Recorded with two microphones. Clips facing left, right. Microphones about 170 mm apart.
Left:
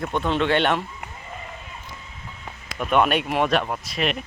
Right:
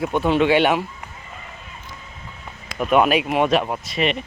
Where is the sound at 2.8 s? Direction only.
5° right (ahead or behind).